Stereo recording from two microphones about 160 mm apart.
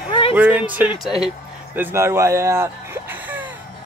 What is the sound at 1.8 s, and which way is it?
Speech, 15° right (ahead or behind).